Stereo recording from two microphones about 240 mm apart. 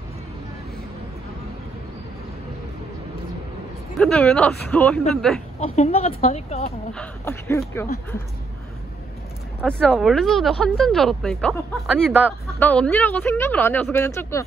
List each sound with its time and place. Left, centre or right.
4.0 s speech: centre
5.6 s a woman's voice: left
6.9 s speech: centre
9.6 s speech: centre